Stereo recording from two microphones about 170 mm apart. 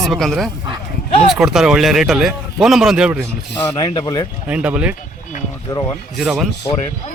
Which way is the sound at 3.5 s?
25° left (ahead or behind).